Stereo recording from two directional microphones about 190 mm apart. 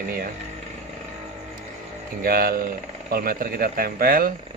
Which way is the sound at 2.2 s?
50° right (ahead or behind).